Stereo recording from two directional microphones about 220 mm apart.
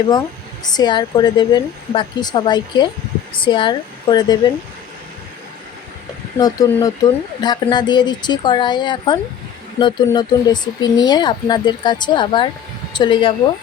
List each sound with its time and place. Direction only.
0.6 s speech: 20° left (ahead or behind)
6.4 s speech: 15° left (ahead or behind)